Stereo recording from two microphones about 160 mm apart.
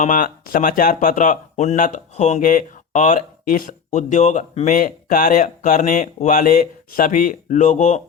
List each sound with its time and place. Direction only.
0.0 s speech: 55° left (ahead or behind)